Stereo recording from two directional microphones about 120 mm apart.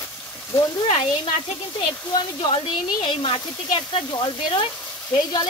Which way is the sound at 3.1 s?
45° left (ahead or behind).